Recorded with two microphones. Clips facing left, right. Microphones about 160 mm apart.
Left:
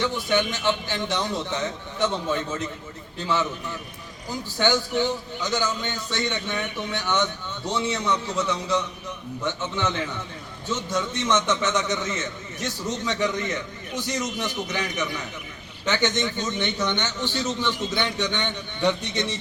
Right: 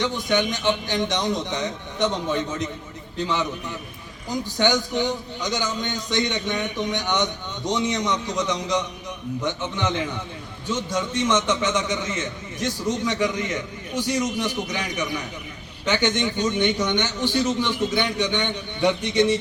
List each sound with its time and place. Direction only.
0.0 s a man's voice: 15° right (ahead or behind)